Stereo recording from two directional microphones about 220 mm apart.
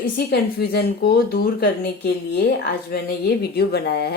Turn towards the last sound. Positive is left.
turn(degrees=45)  # may be behind; listen again after turning